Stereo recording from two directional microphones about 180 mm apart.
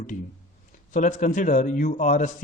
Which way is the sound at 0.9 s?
45° left (ahead or behind).